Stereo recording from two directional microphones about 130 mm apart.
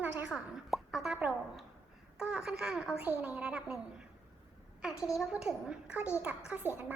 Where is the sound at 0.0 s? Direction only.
10° right (ahead or behind).